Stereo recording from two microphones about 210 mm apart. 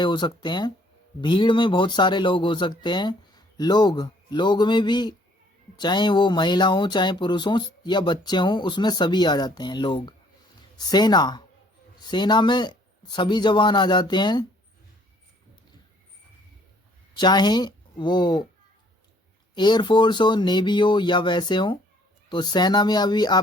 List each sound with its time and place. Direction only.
0.0 s speech: 20° left (ahead or behind)
17.2 s speech: 20° left (ahead or behind)
19.5 s speech: 20° left (ahead or behind)